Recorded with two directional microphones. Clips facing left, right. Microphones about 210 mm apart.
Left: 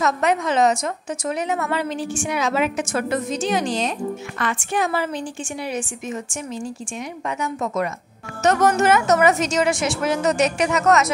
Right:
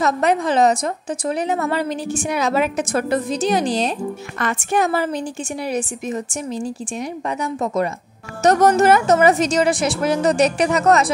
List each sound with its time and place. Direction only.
0.0 s a woman's voice: 35° right (ahead or behind)